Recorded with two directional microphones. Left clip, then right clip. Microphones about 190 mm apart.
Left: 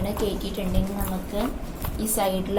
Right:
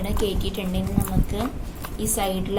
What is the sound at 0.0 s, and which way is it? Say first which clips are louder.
Speech: right 1 dB; 25° right (ahead or behind).